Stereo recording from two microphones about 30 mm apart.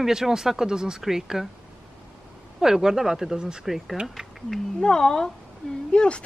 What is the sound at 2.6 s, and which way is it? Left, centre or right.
Speech, centre.